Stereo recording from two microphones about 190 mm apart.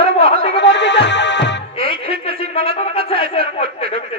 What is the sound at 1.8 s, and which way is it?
Music, 30° left (ahead or behind).